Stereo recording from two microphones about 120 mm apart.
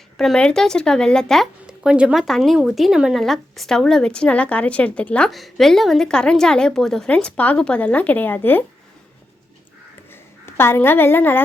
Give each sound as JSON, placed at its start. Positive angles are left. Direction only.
{"t": 0.2, "sound": "a woman's voice", "side_deg": 5}
{"t": 1.6, "sound": "a sound", "side_deg": -5}
{"t": 2.2, "sound": "a woman's voice", "side_deg": 0}
{"t": 10.1, "sound": "a woman's voice", "side_deg": 20}